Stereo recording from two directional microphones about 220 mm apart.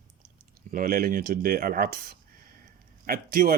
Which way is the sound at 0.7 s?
40° right (ahead or behind).